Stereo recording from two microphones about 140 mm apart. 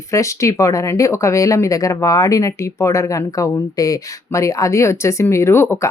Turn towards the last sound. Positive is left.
turn(degrees=15)  # may be behind; listen again after turning